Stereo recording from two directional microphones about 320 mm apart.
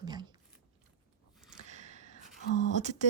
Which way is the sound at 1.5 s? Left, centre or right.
Right.